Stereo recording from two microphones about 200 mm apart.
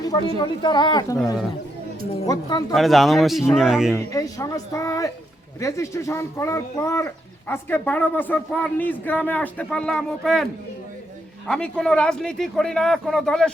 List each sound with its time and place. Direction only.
0.0 s a sound: 20° left (ahead or behind)
0.3 s a woman's voice: 20° left (ahead or behind)
2.2 s a woman's voice: 20° left (ahead or behind)
2.7 s speech: centre (ahead or behind)
4.1 s speech: 15° left (ahead or behind)